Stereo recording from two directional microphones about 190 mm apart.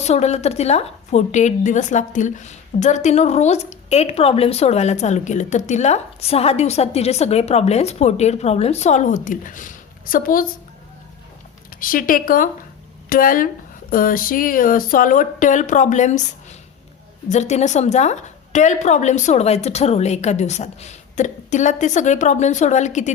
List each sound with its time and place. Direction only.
0.0 s a woman's voice: 35° left (ahead or behind)
11.8 s a woman's voice: 45° left (ahead or behind)